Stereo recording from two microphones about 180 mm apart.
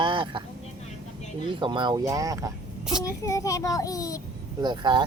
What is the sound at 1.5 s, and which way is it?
Speech, 25° right (ahead or behind).